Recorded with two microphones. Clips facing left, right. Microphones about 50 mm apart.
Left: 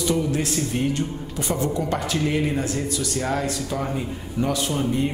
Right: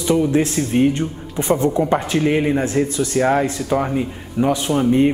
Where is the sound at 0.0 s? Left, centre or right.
Right.